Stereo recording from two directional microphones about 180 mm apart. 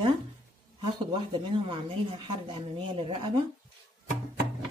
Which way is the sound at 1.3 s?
30° right (ahead or behind).